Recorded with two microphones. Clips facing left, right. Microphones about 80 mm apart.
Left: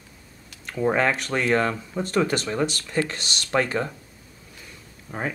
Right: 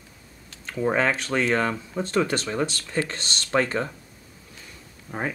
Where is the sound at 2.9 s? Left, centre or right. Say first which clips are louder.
Right 1 dB; right.